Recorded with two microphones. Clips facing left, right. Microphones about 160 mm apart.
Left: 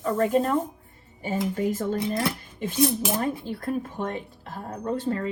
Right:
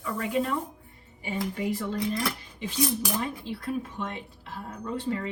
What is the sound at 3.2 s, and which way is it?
Speech, 45° left (ahead or behind).